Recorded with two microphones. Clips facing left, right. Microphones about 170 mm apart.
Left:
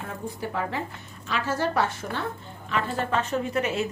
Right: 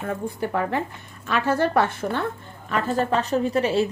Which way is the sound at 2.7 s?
35° right (ahead or behind).